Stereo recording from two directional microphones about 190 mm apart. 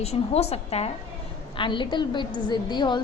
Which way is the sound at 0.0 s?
35° left (ahead or behind).